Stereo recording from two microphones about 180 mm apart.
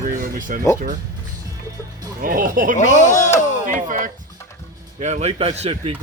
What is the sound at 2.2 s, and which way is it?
Speech, 50° right (ahead or behind).